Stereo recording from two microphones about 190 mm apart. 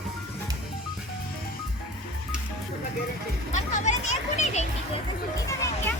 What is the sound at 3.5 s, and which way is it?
A child's voice, 40° left (ahead or behind).